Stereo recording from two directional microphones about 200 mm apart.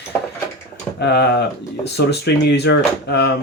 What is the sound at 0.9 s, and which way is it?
Speech, 55° left (ahead or behind).